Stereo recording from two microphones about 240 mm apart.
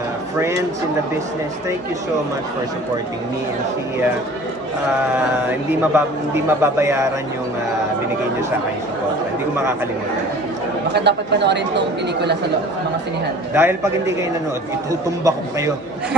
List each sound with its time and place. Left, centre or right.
5.9 s a man's voice: centre
10.9 s speech: right
13.6 s a man's voice: centre